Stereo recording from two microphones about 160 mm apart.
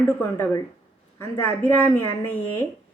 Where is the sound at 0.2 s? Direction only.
15° left (ahead or behind).